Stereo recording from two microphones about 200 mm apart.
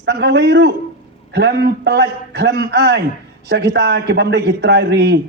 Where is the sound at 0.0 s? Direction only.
55° right (ahead or behind).